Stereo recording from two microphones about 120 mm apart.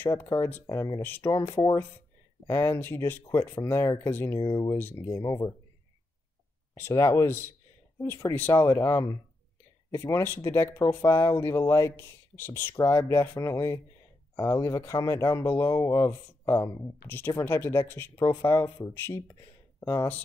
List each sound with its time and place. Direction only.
0.0 s speech: 20° left (ahead or behind)
1.0 s speech: 15° left (ahead or behind)
1.6 s speech: 30° left (ahead or behind)
4.4 s speech: 35° left (ahead or behind)
4.7 s speech: 15° left (ahead or behind)
5.1 s speech: 30° left (ahead or behind)
6.8 s speech: 25° left (ahead or behind)
8.6 s speech: 30° left (ahead or behind)